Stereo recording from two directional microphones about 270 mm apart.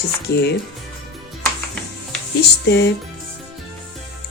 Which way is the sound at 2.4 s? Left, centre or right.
Left.